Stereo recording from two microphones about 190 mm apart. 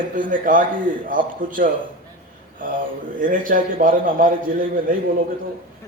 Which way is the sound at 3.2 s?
45° right (ahead or behind).